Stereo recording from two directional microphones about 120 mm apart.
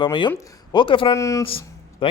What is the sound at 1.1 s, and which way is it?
Speech, 25° left (ahead or behind).